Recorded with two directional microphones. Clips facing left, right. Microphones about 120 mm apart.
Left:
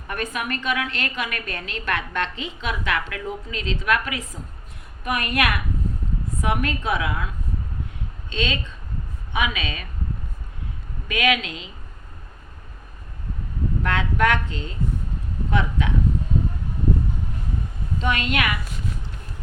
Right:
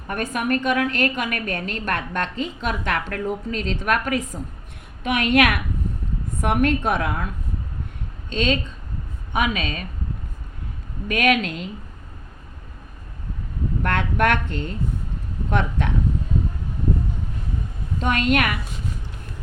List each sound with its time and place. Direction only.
0.1 s a woman's voice: 45° right (ahead or behind)
5.0 s a woman's voice: 70° right (ahead or behind); by 7.3 s 50° right (ahead or behind)
8.3 s a woman's voice: 45° right (ahead or behind)
11.1 s a woman's voice: 45° right (ahead or behind)
13.8 s a woman's voice: 55° right (ahead or behind)
18.0 s a woman's voice: 45° right (ahead or behind)